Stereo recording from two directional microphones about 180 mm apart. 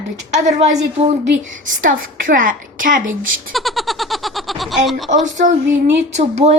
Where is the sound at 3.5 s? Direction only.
Centre (ahead or behind).